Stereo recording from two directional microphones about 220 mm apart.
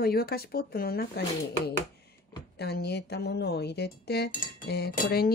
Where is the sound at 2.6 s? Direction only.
45° left (ahead or behind).